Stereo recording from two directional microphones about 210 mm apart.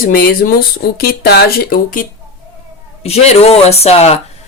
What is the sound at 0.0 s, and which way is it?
Speech, 45° left (ahead or behind).